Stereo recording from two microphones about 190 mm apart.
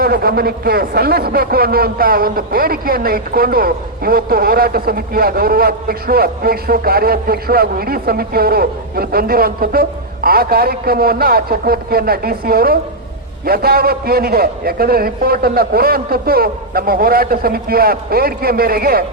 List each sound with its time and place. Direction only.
0.0 s a man's voice: 50° right (ahead or behind)